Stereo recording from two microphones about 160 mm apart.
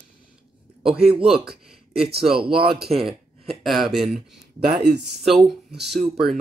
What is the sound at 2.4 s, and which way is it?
Speech, 35° right (ahead or behind).